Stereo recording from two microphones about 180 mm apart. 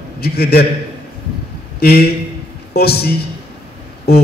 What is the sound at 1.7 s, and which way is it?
A man's voice, 60° left (ahead or behind).